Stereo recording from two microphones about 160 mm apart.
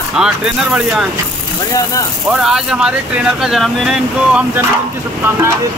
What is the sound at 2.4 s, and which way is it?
Speech, 5° right (ahead or behind).